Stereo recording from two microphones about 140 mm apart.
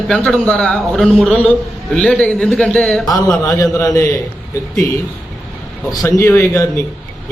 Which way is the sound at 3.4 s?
20° left (ahead or behind).